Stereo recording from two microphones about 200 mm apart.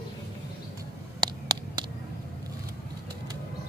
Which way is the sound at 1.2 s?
20° right (ahead or behind).